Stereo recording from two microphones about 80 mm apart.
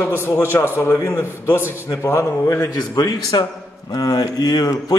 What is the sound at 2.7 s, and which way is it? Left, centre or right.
A man's voice, left.